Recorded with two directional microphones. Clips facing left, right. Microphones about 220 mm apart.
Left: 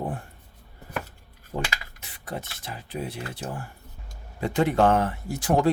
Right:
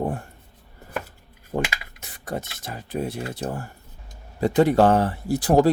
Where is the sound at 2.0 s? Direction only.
45° right (ahead or behind).